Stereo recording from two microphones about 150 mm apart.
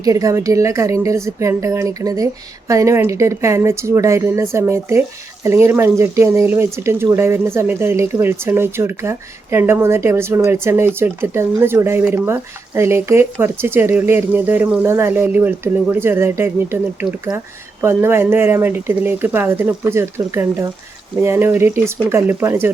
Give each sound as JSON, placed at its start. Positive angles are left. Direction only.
{"t": 0.0, "sound": "speech", "side_deg": -20}